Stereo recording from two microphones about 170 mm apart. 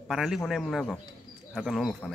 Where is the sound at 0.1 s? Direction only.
Centre (ahead or behind).